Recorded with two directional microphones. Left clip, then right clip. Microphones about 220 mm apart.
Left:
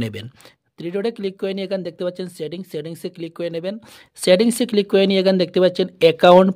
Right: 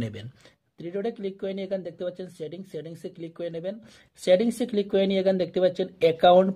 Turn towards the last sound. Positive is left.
turn(degrees=40)  # may be behind; listen again after turning